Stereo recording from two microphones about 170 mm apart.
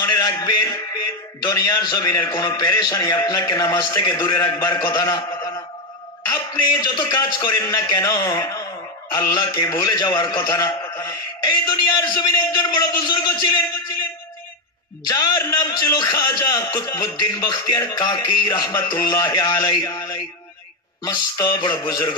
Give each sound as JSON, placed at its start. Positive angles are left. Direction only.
{"t": 0.0, "sound": "a man's voice", "side_deg": 20}
{"t": 6.6, "sound": "a man's voice", "side_deg": 25}
{"t": 15.0, "sound": "a man's voice", "side_deg": 20}